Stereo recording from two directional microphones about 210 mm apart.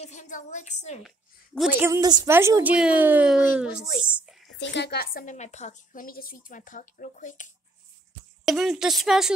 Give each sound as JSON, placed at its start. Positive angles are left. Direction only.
{"t": 0.0, "sound": "a woman's voice", "side_deg": 35}
{"t": 1.0, "sound": "a woman's voice", "side_deg": 0}
{"t": 4.0, "sound": "a sound", "side_deg": 0}
{"t": 4.6, "sound": "a woman's voice", "side_deg": 55}
{"t": 8.5, "sound": "a woman's voice", "side_deg": 0}